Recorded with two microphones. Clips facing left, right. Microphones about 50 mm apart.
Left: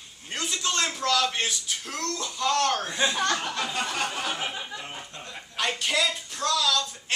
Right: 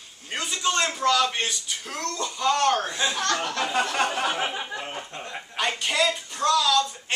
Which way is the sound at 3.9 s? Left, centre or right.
Right.